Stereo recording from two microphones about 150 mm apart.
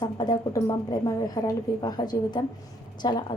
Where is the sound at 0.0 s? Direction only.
30° left (ahead or behind).